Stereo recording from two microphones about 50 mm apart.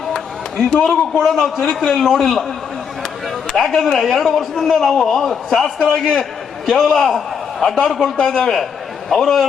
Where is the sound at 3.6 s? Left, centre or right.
Centre.